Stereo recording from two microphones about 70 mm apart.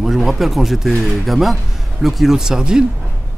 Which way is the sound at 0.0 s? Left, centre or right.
Centre.